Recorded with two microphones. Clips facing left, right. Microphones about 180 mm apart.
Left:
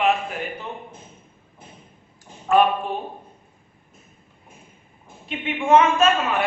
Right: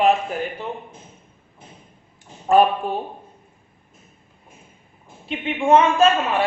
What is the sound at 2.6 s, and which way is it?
Speech, 35° right (ahead or behind).